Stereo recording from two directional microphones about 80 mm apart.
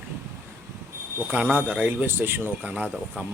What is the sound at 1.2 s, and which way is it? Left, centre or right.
Speech, centre.